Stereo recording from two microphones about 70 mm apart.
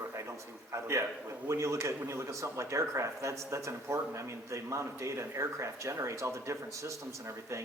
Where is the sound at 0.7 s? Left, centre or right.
Right.